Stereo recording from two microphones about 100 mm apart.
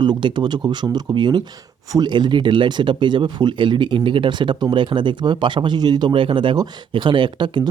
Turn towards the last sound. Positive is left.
turn(degrees=-55)  # may be behind; listen again after turning